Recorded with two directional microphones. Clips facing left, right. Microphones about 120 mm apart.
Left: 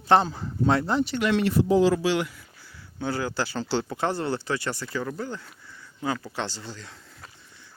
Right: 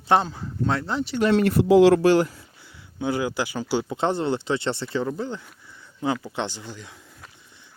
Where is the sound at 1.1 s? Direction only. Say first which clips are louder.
Right 8 dB; 35° right (ahead or behind).